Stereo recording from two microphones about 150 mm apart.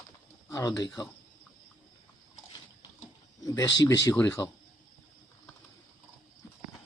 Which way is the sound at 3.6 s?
25° left (ahead or behind).